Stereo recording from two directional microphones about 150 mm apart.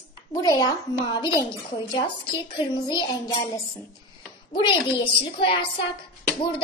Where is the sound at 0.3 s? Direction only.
25° left (ahead or behind).